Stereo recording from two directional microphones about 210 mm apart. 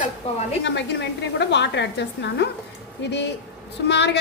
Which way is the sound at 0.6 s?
55° left (ahead or behind).